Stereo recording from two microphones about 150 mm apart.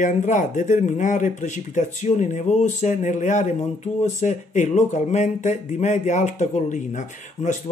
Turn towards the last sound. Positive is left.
turn(degrees=55)  # may be behind; listen again after turning